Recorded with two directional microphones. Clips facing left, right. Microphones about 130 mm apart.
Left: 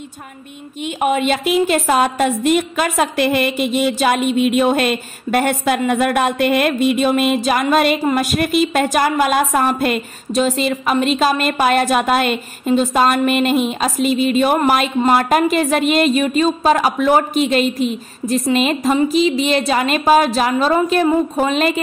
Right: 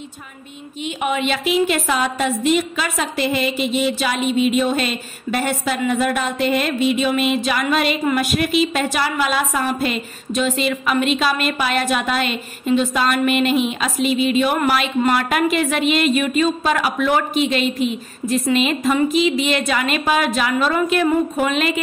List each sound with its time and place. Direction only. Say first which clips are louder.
0.8 s a woman's voice: left 4 dB; 45° left (ahead or behind)
10.3 s a woman's voice: left 3 dB; 35° left (ahead or behind)